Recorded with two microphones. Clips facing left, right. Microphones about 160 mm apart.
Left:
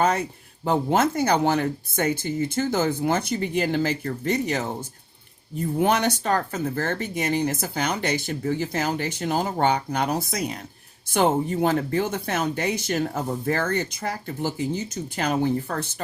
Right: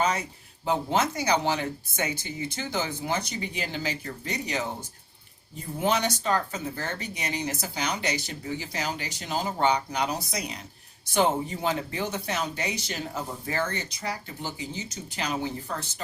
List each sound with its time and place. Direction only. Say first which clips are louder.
0.0 s speech: left 5 dB; 55° left (ahead or behind)
5.8 s speech: left 3 dB; 55° left (ahead or behind)